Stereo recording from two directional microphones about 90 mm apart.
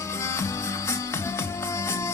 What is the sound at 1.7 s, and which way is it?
Music, 30° left (ahead or behind).